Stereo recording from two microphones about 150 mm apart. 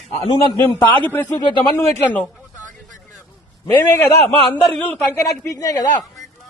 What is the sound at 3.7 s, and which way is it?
Speech, 15° left (ahead or behind).